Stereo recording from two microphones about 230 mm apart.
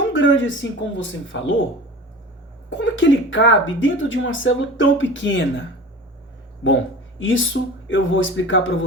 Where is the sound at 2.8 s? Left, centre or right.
Left.